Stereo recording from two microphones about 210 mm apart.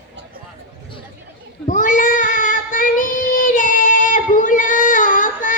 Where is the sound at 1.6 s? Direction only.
40° left (ahead or behind).